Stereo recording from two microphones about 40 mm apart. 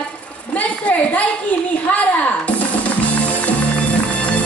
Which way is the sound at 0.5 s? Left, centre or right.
Left.